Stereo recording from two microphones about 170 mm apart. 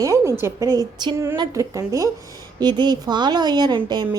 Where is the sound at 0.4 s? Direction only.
20° right (ahead or behind).